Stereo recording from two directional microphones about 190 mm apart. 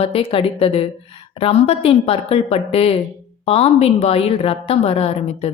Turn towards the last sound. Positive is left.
turn(degrees=30)  # may be behind; listen again after turning